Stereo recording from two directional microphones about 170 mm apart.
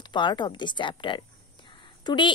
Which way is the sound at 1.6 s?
30° left (ahead or behind).